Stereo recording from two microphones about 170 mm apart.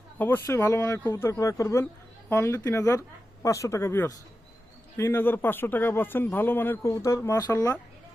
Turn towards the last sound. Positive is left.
turn(degrees=20)  # may be behind; listen again after turning